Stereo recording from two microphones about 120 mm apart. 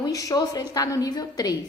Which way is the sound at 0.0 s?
30° left (ahead or behind).